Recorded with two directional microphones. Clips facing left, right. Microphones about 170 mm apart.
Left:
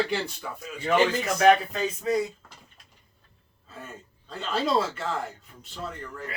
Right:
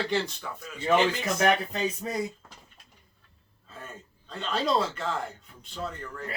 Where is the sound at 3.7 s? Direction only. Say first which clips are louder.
Left 1 dB; 5° left (ahead or behind).